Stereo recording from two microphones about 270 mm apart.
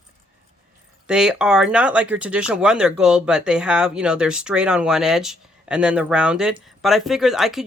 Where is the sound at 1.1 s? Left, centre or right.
Centre.